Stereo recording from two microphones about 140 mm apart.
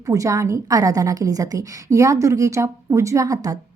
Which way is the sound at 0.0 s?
25° right (ahead or behind).